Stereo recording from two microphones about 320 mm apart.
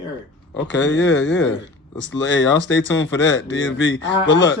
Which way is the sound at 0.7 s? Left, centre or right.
Left.